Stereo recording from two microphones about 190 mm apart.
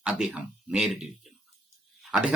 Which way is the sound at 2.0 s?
5° right (ahead or behind).